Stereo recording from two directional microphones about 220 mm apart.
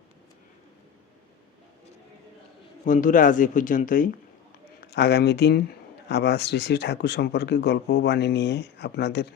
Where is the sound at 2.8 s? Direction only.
35° left (ahead or behind).